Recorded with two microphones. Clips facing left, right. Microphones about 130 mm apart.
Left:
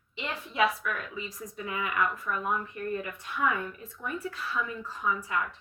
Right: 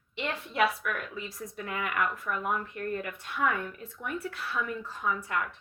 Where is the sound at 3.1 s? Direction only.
65° right (ahead or behind).